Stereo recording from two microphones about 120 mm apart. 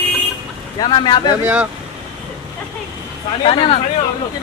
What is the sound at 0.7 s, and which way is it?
Speech, 40° left (ahead or behind).